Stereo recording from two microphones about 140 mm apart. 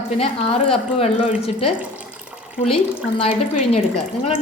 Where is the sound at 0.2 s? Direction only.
45° left (ahead or behind).